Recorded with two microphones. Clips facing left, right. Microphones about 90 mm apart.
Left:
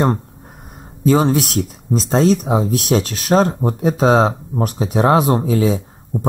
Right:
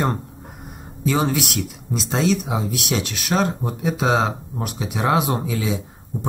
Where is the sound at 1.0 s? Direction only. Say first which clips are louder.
Left 6 dB; 35° left (ahead or behind).